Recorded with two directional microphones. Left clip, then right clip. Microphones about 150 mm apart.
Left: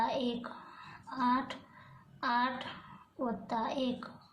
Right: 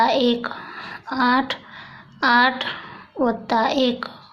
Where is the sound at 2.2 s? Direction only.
35° right (ahead or behind).